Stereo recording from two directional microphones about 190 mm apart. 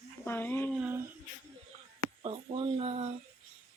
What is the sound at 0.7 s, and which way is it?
Speech, 10° right (ahead or behind).